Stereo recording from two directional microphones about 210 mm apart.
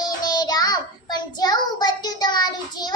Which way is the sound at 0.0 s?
20° left (ahead or behind).